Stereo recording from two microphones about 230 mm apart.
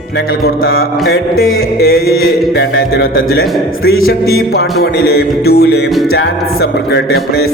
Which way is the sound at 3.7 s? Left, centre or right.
Left.